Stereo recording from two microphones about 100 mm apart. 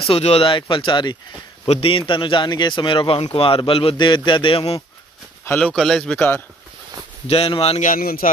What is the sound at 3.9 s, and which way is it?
Speech, 50° left (ahead or behind).